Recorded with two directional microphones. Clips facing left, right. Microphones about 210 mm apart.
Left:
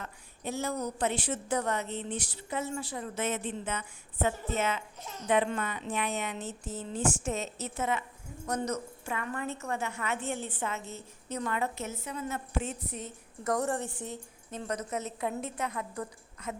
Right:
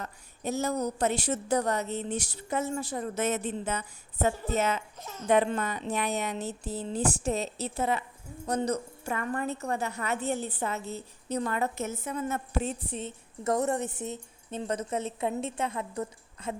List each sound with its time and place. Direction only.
0.0 s a woman's voice: 40° right (ahead or behind)
12.6 s a woman's voice: 30° right (ahead or behind)